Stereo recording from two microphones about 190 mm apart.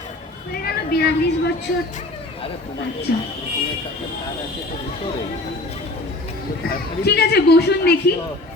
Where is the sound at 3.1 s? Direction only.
60° left (ahead or behind).